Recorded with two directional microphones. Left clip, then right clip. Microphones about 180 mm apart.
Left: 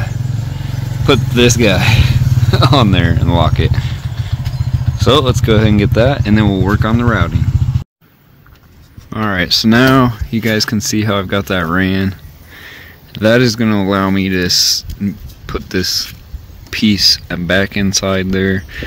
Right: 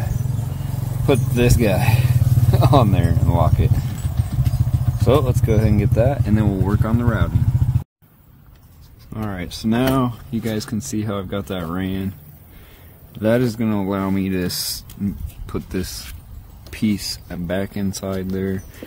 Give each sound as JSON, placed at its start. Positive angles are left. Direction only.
{"t": 1.0, "sound": "speech", "side_deg": 5}
{"t": 4.9, "sound": "speech", "side_deg": 10}
{"t": 9.1, "sound": "speech", "side_deg": 20}
{"t": 13.1, "sound": "speech", "side_deg": 10}